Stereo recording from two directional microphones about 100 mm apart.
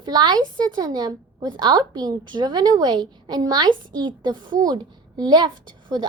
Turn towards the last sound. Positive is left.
turn(degrees=-45)  # may be behind; listen again after turning